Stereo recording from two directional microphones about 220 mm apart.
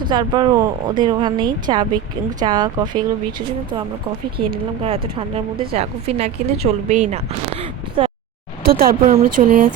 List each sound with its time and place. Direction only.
0.1 s speech: 20° right (ahead or behind)
4.8 s speech: 25° right (ahead or behind)
8.0 s a sound: 25° right (ahead or behind)
8.8 s speech: 40° right (ahead or behind)